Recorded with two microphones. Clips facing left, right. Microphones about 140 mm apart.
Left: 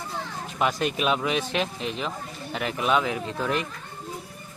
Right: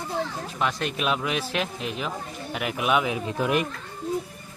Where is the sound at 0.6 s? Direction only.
5° left (ahead or behind); by 3.6 s 15° right (ahead or behind).